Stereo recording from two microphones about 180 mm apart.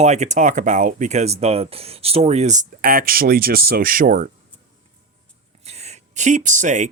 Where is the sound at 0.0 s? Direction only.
40° right (ahead or behind).